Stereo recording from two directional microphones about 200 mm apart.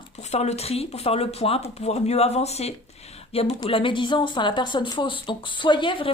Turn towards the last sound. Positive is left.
turn(degrees=25)  # may be behind; listen again after turning